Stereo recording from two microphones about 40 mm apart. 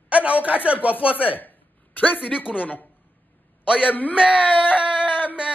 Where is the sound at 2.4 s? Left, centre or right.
Left.